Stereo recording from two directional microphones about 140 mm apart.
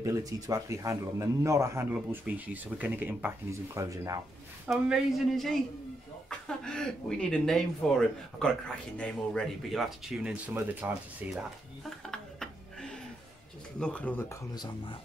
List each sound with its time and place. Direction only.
0.0 s speech: 25° right (ahead or behind)
4.6 s speech: 5° right (ahead or behind)
12.1 s a sound: 5° left (ahead or behind)
13.7 s speech: 10° left (ahead or behind)
14.5 s speech: 30° left (ahead or behind)